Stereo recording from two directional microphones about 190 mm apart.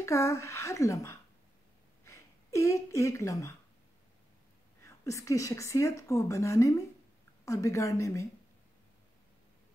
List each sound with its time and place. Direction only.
0.0 s a woman's voice: 15° left (ahead or behind)
4.8 s a woman's voice: 15° left (ahead or behind)